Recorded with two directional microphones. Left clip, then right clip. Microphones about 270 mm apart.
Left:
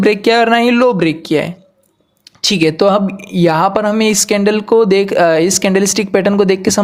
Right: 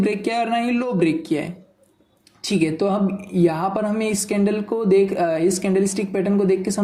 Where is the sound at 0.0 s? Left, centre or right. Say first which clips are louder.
Left 11 dB; left.